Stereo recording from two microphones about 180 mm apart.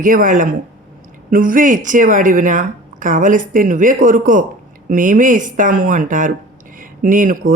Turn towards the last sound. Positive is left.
turn(degrees=-50)  # may be behind; listen again after turning